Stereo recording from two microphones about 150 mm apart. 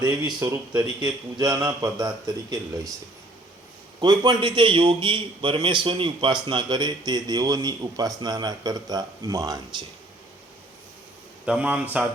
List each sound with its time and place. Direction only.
0.3 s a man's voice: 20° right (ahead or behind)
4.0 s a man's voice: 30° right (ahead or behind)
11.4 s speech: 5° right (ahead or behind)